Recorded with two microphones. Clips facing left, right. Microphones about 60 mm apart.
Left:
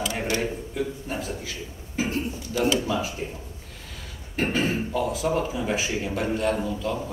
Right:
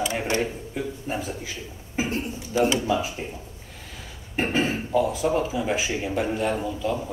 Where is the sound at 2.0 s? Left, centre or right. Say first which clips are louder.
Even; centre.